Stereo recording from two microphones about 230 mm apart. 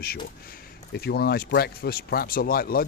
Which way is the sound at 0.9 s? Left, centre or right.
Left.